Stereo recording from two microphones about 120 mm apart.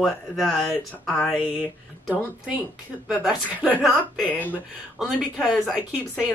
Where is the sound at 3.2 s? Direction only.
10° right (ahead or behind).